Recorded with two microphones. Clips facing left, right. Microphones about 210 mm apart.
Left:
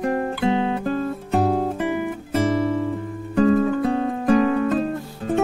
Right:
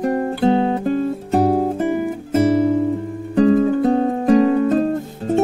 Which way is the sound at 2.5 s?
40° right (ahead or behind).